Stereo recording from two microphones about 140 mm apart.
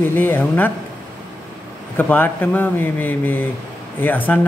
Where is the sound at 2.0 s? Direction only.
15° left (ahead or behind).